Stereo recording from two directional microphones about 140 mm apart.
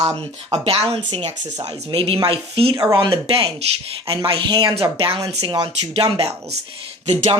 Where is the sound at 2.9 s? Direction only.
30° right (ahead or behind).